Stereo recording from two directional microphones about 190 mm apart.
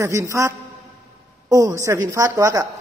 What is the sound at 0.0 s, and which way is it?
A man's voice, 15° right (ahead or behind).